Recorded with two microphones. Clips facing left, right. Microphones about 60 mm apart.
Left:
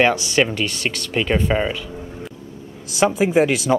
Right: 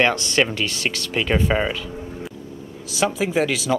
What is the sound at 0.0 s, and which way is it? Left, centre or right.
Speech, centre.